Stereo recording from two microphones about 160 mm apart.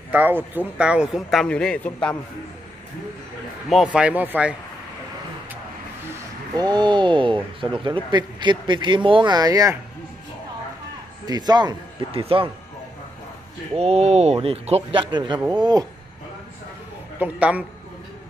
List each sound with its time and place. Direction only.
0.1 s a man's voice: 10° right (ahead or behind); by 2.1 s 10° left (ahead or behind)
3.6 s speech: 5° right (ahead or behind)
6.5 s speech: 25° right (ahead or behind)
11.2 s speech: 25° right (ahead or behind)
13.7 s a man's voice: 40° right (ahead or behind); by 15.9 s 25° right (ahead or behind)
17.2 s speech: 10° right (ahead or behind)